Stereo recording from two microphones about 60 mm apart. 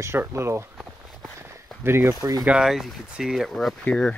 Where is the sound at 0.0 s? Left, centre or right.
Right.